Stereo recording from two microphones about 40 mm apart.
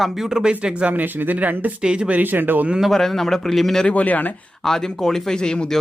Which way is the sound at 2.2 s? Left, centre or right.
Right.